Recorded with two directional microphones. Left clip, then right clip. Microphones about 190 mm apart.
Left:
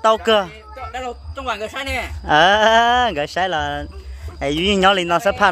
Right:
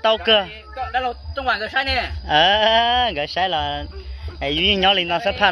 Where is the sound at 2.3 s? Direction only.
40° left (ahead or behind).